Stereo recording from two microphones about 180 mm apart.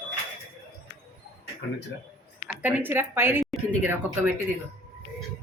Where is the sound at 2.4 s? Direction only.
10° right (ahead or behind).